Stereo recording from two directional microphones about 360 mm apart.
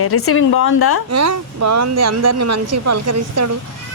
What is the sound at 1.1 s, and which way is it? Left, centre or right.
Speech, right.